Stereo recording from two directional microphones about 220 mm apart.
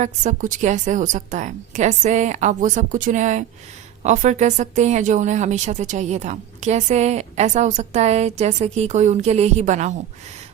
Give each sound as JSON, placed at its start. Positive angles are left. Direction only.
{"t": 0.0, "sound": "speech", "side_deg": -35}